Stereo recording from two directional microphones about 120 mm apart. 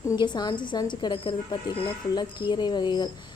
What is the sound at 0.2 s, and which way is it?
Speech, 35° left (ahead or behind).